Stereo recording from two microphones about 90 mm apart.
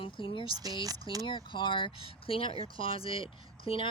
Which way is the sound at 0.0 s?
75° left (ahead or behind).